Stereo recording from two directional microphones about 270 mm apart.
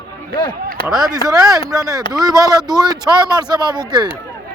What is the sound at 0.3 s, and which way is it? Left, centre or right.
Speech, centre.